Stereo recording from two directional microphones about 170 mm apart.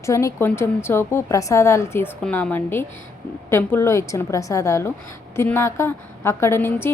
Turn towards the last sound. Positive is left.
turn(degrees=15)  # may be behind; listen again after turning